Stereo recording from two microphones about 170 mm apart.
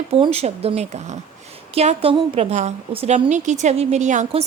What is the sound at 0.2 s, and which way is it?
A woman's voice, 35° right (ahead or behind).